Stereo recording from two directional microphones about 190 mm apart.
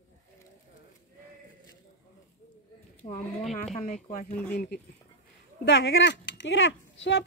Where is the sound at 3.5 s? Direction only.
40° left (ahead or behind).